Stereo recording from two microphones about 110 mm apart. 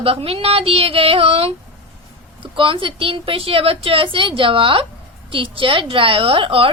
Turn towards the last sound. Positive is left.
turn(degrees=-55)  # may be behind; listen again after turning